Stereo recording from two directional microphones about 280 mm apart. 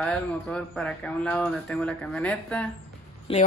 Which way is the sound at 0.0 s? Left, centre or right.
Centre.